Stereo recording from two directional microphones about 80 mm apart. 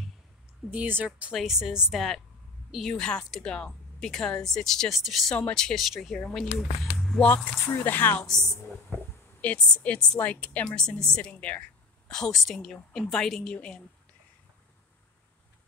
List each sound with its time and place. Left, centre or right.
0.7 s speech: right
1.3 s speech: centre
7.2 s a woman's voice: centre
8.3 s a woman's voice: centre